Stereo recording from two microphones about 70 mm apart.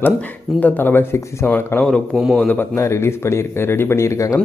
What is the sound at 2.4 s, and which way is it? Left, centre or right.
Speech, left.